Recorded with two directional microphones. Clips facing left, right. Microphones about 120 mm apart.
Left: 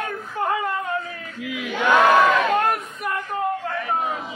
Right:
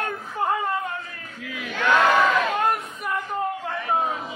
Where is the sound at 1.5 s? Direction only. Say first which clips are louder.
Left 2 dB; 15° left (ahead or behind).